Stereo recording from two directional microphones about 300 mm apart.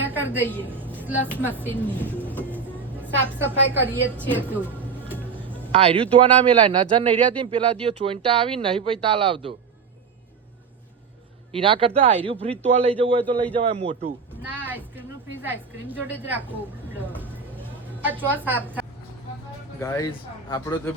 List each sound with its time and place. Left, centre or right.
0.0 s a sound: centre
0.6 s speech: centre
1.6 s a woman's voice: centre
3.8 s speech: centre
5.0 s music: centre
5.7 s speech: centre
11.5 s speech: centre
14.4 s a woman's voice: centre
19.8 s speech: centre